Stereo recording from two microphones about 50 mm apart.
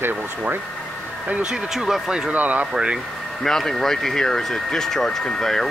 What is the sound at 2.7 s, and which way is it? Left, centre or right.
Speech, centre.